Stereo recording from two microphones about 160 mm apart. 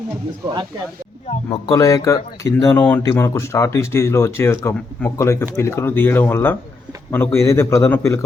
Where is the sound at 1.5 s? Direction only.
25° left (ahead or behind).